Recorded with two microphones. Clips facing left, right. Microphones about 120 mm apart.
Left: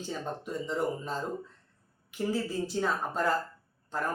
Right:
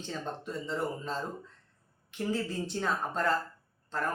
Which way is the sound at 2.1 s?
5° left (ahead or behind).